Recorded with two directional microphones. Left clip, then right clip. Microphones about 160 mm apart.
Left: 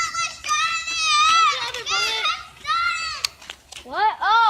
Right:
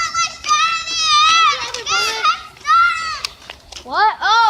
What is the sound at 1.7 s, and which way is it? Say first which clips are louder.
Children playing: right 4 dB; 30° left (ahead or behind).